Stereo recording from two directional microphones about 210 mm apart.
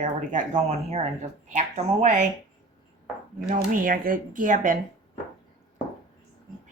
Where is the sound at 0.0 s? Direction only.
35° right (ahead or behind).